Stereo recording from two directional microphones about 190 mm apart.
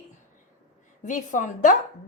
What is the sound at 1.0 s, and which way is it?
Speech, 45° left (ahead or behind).